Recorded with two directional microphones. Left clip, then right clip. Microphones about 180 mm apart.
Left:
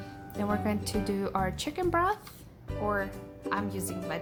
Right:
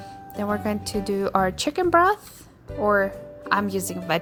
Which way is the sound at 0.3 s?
35° right (ahead or behind).